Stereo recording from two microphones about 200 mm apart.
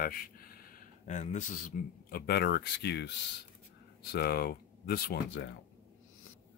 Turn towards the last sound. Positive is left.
turn(degrees=55)  # may be behind; listen again after turning